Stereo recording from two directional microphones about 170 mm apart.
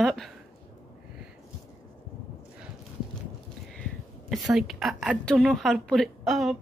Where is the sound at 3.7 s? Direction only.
Centre (ahead or behind).